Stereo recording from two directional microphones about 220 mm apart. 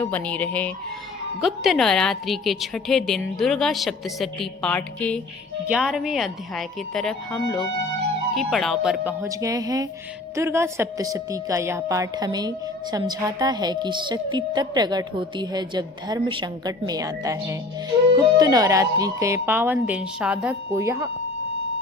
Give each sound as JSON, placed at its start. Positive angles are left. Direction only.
{"t": 0.0, "sound": "a woman's voice", "side_deg": 5}